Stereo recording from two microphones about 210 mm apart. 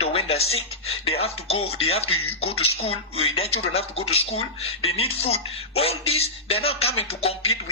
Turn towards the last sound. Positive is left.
turn(degrees=30)  # may be behind; listen again after turning